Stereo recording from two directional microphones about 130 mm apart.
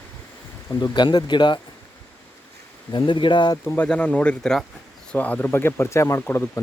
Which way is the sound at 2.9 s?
40° left (ahead or behind).